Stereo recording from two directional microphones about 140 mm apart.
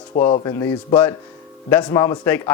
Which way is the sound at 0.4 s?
20° left (ahead or behind).